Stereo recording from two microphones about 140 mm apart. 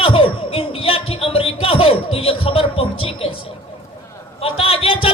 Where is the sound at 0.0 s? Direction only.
40° left (ahead or behind).